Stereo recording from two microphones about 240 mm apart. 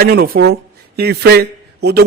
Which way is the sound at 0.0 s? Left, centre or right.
Right.